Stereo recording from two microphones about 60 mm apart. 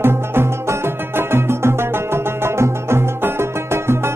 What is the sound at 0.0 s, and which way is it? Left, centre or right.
Music, right.